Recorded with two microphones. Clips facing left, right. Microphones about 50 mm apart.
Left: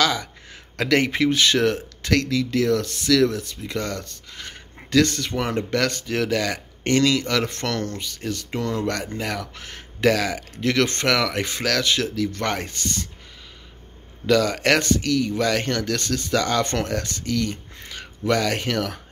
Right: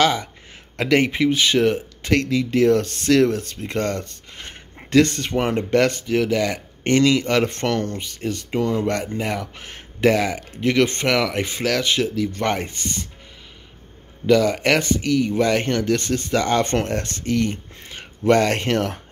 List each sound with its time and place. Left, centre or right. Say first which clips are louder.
0.0 s speech: right 3 dB; right
6.0 s speech: right 3 dB; centre; by 8.5 s right
8.5 s speech: right 4 dB; centre
14.2 s speech: right 2 dB; centre; by 18.9 s right